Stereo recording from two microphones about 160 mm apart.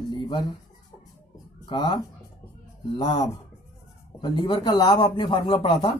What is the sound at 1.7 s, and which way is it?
Speech, 30° left (ahead or behind).